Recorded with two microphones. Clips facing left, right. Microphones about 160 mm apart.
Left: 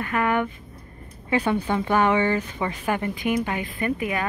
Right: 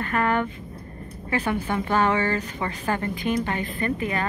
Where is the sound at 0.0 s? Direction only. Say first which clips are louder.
Even; 10° left (ahead or behind).